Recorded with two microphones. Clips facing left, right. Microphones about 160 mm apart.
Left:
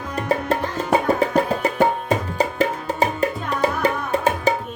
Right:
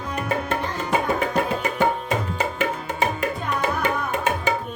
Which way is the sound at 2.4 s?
35° left (ahead or behind).